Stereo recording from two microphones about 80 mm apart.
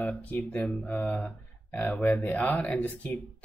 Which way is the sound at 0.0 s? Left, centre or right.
Left.